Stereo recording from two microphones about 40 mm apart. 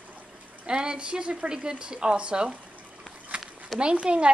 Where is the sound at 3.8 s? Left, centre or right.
Right.